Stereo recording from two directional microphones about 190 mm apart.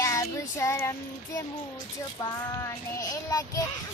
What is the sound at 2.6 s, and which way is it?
Child singing, 15° left (ahead or behind).